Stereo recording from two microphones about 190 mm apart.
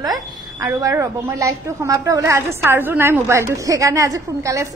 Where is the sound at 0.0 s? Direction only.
20° right (ahead or behind).